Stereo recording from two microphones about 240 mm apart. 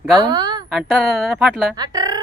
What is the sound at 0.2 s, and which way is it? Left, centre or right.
Speech, centre.